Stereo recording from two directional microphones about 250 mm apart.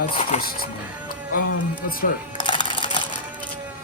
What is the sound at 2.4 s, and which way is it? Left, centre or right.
Typewriter, centre.